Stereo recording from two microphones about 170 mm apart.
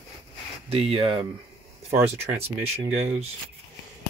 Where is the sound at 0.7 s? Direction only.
35° right (ahead or behind).